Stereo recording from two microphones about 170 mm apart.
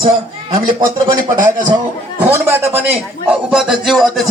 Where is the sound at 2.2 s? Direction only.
15° right (ahead or behind).